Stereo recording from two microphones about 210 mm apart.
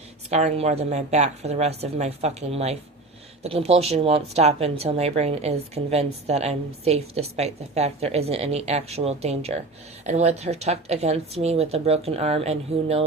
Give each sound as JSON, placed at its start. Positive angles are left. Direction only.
{"t": 0.3, "sound": "speech", "side_deg": -30}